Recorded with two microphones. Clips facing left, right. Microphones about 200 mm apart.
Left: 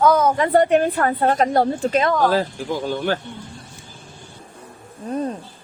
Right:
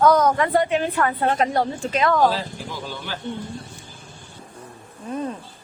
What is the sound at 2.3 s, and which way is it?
Speech, 50° left (ahead or behind).